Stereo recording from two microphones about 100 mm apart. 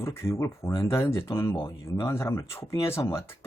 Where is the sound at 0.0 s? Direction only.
25° left (ahead or behind).